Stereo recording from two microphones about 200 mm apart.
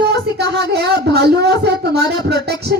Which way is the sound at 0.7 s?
55° right (ahead or behind).